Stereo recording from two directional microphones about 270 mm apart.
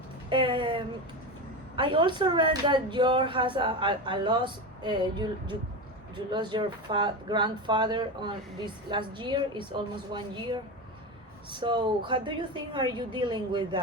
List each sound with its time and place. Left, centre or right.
0.3 s speech: centre